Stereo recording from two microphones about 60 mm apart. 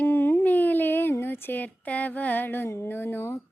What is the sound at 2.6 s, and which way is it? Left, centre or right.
Speech, left.